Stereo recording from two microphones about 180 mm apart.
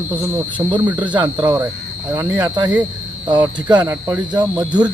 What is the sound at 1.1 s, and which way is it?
Speech, 25° right (ahead or behind).